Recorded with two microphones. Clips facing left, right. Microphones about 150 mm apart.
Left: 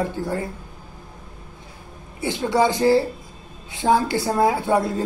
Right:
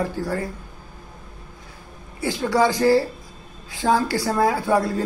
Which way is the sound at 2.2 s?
20° left (ahead or behind).